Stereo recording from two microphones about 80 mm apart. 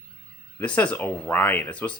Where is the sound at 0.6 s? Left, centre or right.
Centre.